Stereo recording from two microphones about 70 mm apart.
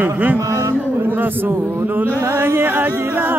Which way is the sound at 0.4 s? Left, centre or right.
Right.